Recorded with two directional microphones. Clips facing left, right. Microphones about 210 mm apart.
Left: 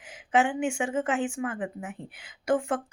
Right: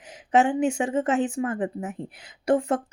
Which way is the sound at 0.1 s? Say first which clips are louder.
Right 4 dB; 40° right (ahead or behind).